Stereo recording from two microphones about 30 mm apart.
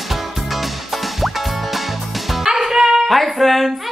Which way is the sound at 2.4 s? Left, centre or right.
Centre.